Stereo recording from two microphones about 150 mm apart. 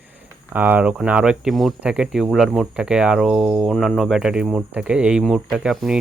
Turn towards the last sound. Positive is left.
turn(degrees=-5)  # may be behind; listen again after turning